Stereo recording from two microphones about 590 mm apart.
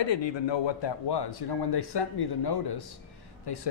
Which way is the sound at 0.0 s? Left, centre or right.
Left.